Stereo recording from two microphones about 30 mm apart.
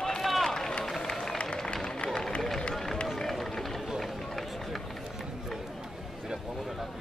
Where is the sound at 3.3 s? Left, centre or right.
Centre.